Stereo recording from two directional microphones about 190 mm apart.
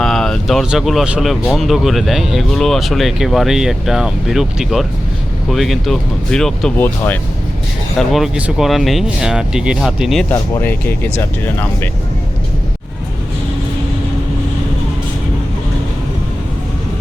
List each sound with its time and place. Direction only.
0.0 s speech: centre (ahead or behind)
7.9 s speech: centre (ahead or behind)
10.6 s speech: 10° left (ahead or behind)